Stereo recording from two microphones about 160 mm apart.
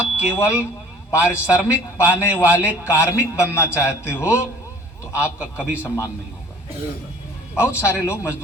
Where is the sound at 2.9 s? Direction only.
15° left (ahead or behind).